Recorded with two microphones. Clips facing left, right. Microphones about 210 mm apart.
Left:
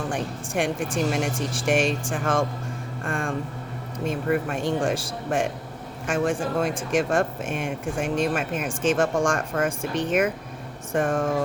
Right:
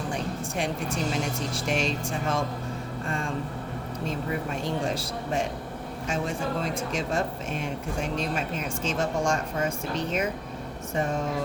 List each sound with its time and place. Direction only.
0.1 s speech: 50° left (ahead or behind)
4.4 s speech: 50° left (ahead or behind)